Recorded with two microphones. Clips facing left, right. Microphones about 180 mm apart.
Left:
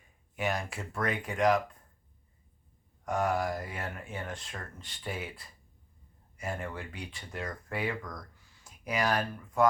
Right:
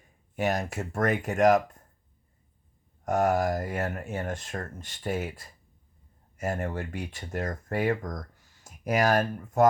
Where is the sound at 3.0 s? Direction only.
45° right (ahead or behind).